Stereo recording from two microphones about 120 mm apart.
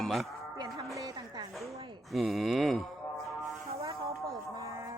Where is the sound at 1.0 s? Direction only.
30° right (ahead or behind).